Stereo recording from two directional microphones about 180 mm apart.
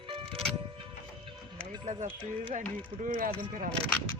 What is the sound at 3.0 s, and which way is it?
Speech, 50° right (ahead or behind).